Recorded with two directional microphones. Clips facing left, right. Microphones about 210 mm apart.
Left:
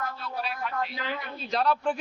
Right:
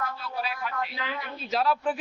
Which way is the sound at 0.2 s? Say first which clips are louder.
Even; centre (ahead or behind).